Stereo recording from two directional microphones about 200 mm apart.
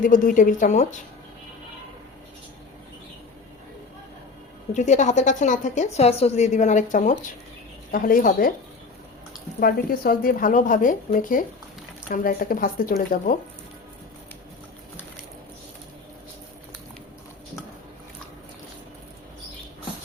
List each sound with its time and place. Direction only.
0.0 s a woman's voice: 40° left (ahead or behind)
4.7 s a woman's voice: 35° left (ahead or behind)
9.6 s a woman's voice: 45° left (ahead or behind)